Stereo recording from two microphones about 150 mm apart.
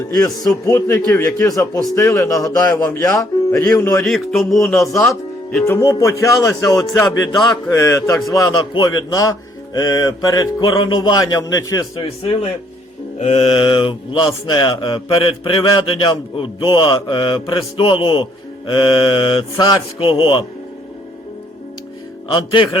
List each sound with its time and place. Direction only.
0.2 s mantra: 20° left (ahead or behind)
4.0 s a sound: centre (ahead or behind)
4.8 s mantra: 20° left (ahead or behind)
5.0 s speech: 5° left (ahead or behind)
5.6 s mantra: 20° left (ahead or behind)
7.2 s speech: 30° left (ahead or behind)
7.7 s mantra: 20° left (ahead or behind)
12.0 s speech: 40° left (ahead or behind)
22.3 s speech: 30° left (ahead or behind)